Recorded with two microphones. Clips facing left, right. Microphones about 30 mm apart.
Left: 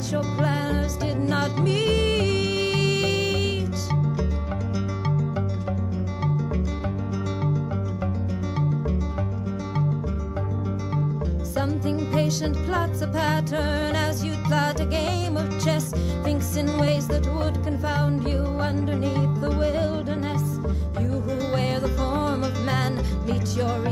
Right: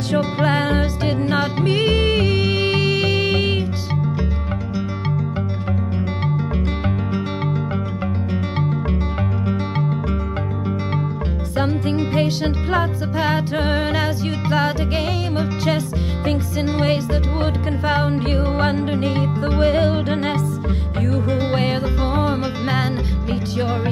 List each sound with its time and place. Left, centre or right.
0.1 s music: right
1.3 s music: right
11.5 s music: right
12.1 s music: right
21.4 s music: right